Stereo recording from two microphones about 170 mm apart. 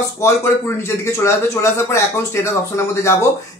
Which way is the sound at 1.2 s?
15° left (ahead or behind).